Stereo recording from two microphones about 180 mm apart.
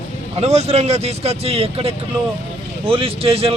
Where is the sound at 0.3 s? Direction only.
35° right (ahead or behind).